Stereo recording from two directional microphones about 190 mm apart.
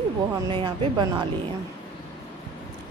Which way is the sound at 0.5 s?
25° right (ahead or behind).